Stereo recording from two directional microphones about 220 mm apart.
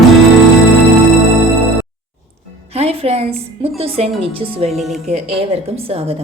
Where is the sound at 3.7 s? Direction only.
25° right (ahead or behind).